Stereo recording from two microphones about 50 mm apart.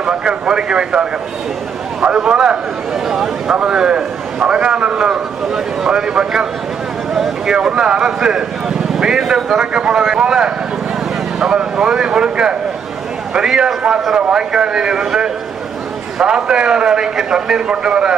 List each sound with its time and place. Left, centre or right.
0.0 s a man's voice: centre
7.1 s speech: centre
7.4 s a man's voice: centre
11.8 s a man's voice: centre